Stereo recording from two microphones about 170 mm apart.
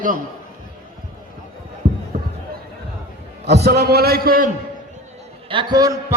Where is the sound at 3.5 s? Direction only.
75° right (ahead or behind).